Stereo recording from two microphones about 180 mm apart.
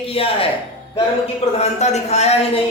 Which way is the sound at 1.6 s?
40° left (ahead or behind).